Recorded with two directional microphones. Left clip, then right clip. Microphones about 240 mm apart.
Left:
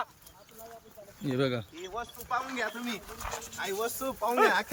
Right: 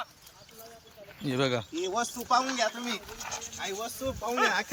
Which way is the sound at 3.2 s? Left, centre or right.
Centre.